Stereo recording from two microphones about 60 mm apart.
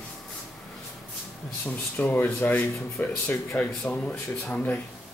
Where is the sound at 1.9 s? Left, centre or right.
Left.